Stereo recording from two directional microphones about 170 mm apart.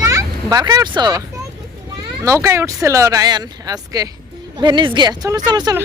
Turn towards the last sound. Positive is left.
turn(degrees=-25)  # may be behind; listen again after turning